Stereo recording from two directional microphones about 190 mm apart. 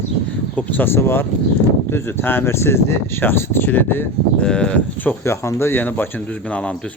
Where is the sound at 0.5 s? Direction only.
10° left (ahead or behind).